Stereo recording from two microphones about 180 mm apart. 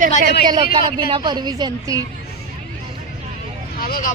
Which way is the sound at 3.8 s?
55° left (ahead or behind).